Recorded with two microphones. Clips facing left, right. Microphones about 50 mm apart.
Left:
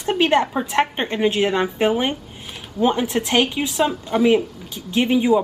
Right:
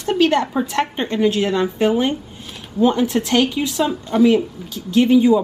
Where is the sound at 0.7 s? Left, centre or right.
Left.